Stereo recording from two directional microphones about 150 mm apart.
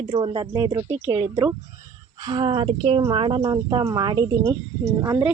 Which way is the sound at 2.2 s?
30° right (ahead or behind).